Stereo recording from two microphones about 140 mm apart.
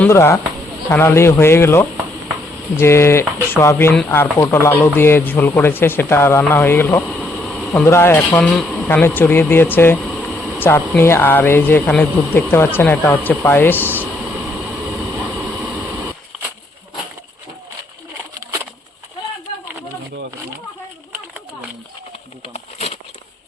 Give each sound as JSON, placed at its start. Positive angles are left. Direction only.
{"t": 0.1, "sound": "speech", "side_deg": 20}
{"t": 7.1, "sound": "a sound", "side_deg": 5}
{"t": 7.7, "sound": "speech", "side_deg": 20}
{"t": 22.5, "sound": "patter", "side_deg": 50}